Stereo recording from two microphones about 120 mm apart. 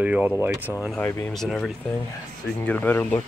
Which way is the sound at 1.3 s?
5° left (ahead or behind).